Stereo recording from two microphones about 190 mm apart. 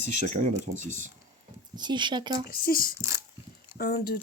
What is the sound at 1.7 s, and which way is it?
Speech, 25° right (ahead or behind).